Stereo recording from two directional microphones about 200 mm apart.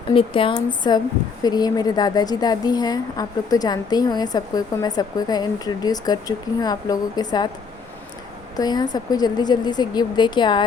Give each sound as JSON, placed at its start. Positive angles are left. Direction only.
{"t": 0.1, "sound": "a woman's voice", "side_deg": 25}
{"t": 8.5, "sound": "a woman's voice", "side_deg": 20}